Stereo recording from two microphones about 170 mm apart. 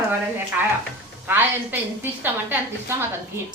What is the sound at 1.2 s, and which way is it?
A woman's voice, 10° right (ahead or behind).